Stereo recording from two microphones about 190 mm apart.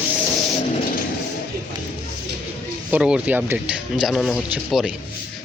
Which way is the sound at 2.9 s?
5° right (ahead or behind).